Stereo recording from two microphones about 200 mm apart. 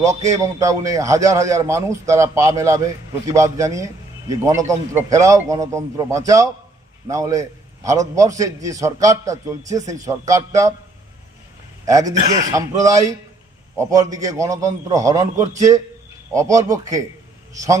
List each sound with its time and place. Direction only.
0.3 s a man's voice: 15° right (ahead or behind)
11.9 s a man's voice: 15° right (ahead or behind)